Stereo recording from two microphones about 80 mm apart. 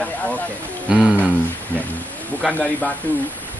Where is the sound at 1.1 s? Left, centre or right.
Left.